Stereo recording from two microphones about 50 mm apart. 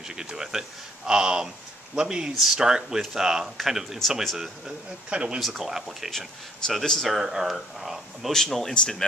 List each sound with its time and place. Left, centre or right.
0.1 s speech: centre
4.6 s speech: centre
5.4 s speech: centre
6.7 s speech: centre
7.2 s speech: centre
8.3 s speech: centre